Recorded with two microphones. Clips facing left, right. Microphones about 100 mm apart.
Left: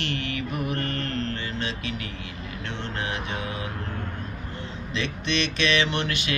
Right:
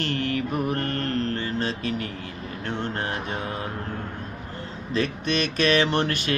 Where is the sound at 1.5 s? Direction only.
40° right (ahead or behind).